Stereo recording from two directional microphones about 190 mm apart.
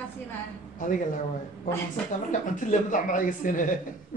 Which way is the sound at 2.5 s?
45° left (ahead or behind).